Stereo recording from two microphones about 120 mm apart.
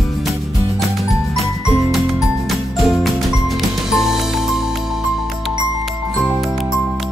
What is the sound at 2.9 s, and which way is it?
Music, centre (ahead or behind).